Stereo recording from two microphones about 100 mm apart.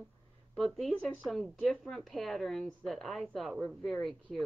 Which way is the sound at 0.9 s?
15° left (ahead or behind).